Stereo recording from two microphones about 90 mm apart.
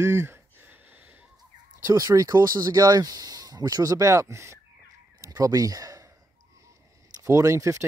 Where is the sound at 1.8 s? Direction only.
40° right (ahead or behind).